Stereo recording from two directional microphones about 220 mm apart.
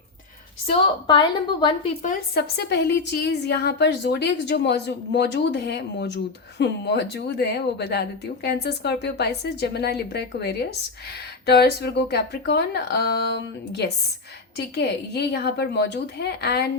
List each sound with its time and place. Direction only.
0.7 s a woman's voice: 20° left (ahead or behind)
2.3 s a woman's voice: 45° left (ahead or behind)
14.5 s a woman's voice: 50° left (ahead or behind)